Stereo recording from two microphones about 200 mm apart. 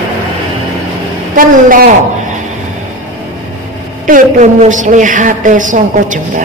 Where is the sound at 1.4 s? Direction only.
45° right (ahead or behind).